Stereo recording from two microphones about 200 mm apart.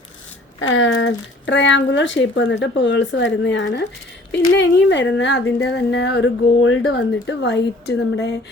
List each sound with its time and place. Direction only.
0.7 s speech: 70° left (ahead or behind)